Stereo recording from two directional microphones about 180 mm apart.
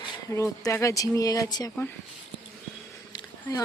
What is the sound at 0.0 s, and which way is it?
Speech, 15° left (ahead or behind).